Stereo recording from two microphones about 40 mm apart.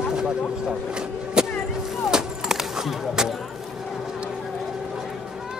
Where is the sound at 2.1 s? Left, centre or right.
Centre.